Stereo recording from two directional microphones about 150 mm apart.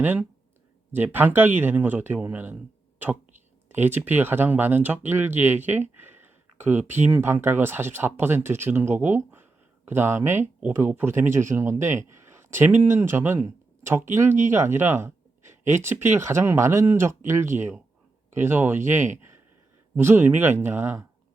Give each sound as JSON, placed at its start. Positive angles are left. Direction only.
{"t": 0.0, "sound": "speech", "side_deg": -10}
{"t": 3.7, "sound": "speech", "side_deg": -15}
{"t": 20.0, "sound": "speech", "side_deg": -15}